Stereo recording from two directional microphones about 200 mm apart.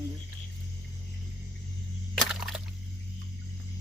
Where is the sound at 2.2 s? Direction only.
Centre (ahead or behind).